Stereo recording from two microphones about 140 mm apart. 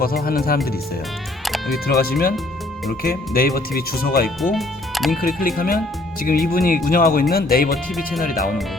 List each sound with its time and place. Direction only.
0.0 s speech: 90° left
1.5 s music: centre (ahead or behind)
1.9 s speech: 90° left
4.4 s speech: centre (ahead or behind)
5.2 s speech: 90° left